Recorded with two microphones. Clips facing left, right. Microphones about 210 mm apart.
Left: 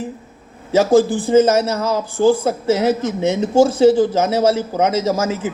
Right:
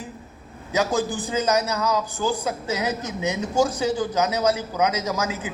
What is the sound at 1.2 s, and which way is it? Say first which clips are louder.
Speech: left 13 dB; 50° left (ahead or behind).